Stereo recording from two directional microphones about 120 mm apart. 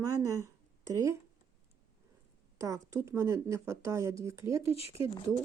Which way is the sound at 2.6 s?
25° right (ahead or behind).